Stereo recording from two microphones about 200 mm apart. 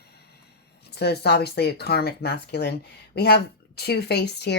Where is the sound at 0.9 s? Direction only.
55° left (ahead or behind).